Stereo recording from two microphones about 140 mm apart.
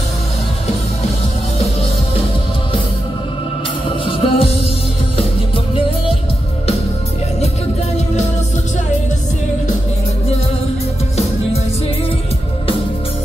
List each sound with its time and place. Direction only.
4.0 s music: 40° left (ahead or behind)